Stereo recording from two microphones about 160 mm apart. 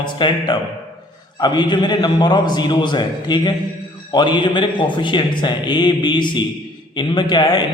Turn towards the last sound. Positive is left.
turn(degrees=25)  # may be behind; listen again after turning